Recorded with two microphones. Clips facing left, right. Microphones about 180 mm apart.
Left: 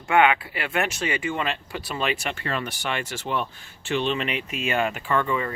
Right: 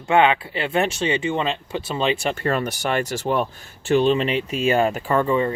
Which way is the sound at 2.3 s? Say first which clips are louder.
Right 7 dB; 45° right (ahead or behind).